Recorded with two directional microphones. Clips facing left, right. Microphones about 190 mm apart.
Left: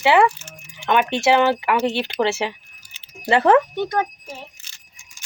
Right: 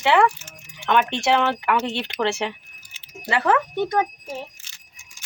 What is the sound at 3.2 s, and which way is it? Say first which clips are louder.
Speech: left 6 dB; 30° left (ahead or behind).